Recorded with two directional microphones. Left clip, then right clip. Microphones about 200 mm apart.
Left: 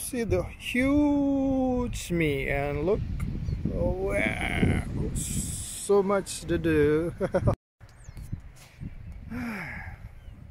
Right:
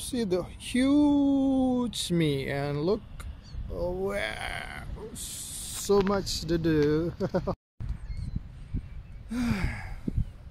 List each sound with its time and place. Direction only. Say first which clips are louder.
0.0 s speech: left 1 dB; centre (ahead or behind)
4.0 s speech: left 3 dB; 10° right (ahead or behind)
9.3 s gasp: right 3 dB; centre (ahead or behind)